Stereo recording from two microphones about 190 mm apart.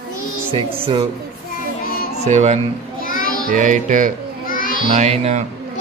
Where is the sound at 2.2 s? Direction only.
35° right (ahead or behind).